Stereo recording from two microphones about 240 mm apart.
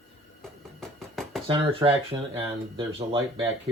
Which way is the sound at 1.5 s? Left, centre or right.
Right.